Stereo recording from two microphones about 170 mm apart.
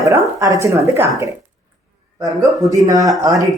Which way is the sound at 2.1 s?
20° right (ahead or behind).